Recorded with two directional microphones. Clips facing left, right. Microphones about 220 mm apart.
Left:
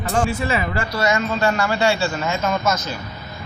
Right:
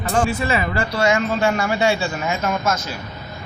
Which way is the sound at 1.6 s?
20° right (ahead or behind).